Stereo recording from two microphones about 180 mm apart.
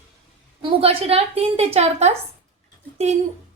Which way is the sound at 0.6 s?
30° right (ahead or behind).